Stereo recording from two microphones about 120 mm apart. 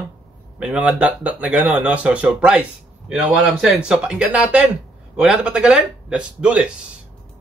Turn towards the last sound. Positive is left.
turn(degrees=-10)  # may be behind; listen again after turning